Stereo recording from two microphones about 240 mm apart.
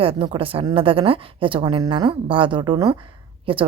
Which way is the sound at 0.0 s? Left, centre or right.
Right.